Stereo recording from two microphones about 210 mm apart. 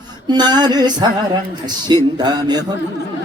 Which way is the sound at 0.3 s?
20° right (ahead or behind).